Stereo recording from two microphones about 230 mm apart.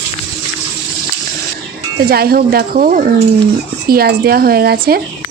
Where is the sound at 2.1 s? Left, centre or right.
Right.